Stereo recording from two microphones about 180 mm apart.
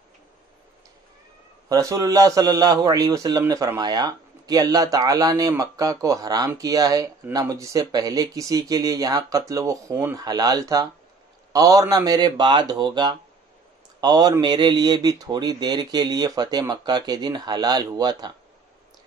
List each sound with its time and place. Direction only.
1.7 s speech: 20° right (ahead or behind)